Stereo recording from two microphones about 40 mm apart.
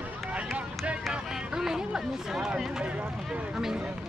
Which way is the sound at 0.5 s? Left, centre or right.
Right.